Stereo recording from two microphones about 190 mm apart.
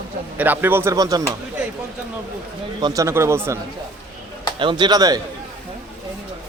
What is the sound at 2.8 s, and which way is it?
Speech, 15° right (ahead or behind).